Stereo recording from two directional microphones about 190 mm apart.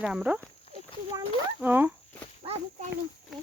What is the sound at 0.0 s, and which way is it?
Speech, 5° right (ahead or behind).